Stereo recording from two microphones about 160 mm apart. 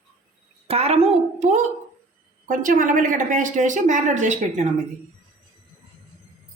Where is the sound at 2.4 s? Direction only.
55° right (ahead or behind).